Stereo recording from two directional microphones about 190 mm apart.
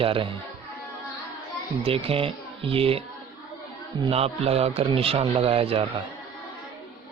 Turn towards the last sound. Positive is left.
turn(degrees=-30)  # may be behind; listen again after turning